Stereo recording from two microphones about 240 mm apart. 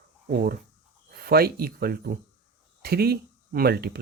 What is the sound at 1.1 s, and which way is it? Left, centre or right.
Speech, right.